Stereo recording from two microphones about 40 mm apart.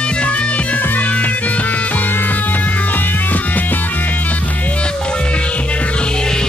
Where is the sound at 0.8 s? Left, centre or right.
Left.